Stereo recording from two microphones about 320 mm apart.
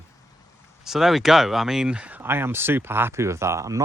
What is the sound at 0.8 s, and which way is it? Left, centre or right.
Speech, centre.